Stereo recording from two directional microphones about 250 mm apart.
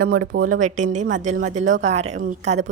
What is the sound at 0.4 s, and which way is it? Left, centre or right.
Speech, right.